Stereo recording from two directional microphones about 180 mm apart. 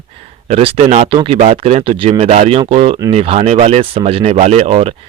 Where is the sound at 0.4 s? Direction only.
35° right (ahead or behind).